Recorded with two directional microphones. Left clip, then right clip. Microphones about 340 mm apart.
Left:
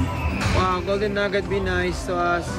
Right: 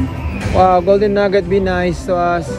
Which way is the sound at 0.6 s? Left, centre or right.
Centre.